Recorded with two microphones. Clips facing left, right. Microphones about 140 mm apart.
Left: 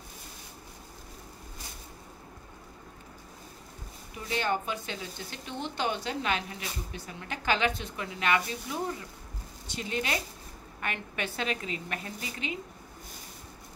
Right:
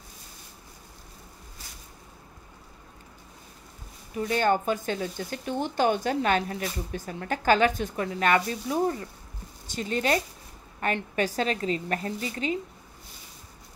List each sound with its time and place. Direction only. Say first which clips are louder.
4.2 s a woman's voice: right 7 dB; 45° right (ahead or behind)